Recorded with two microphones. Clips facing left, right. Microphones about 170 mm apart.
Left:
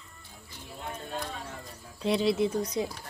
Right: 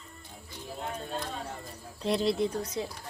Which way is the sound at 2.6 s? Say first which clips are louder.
Left 4 dB; 20° left (ahead or behind).